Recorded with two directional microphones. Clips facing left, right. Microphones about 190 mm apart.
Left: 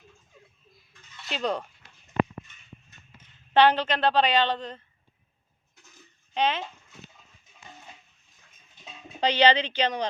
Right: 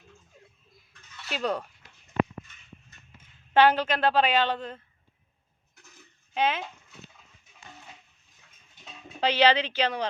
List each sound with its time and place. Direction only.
1.3 s speech: 5° right (ahead or behind)
2.2 s a sound: 15° left (ahead or behind)
3.2 s a woman's voice: 10° right (ahead or behind)
6.3 s speech: 10° right (ahead or behind)
9.2 s speech: 5° right (ahead or behind)